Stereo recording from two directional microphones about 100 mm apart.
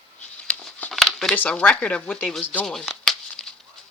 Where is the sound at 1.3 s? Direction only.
15° left (ahead or behind).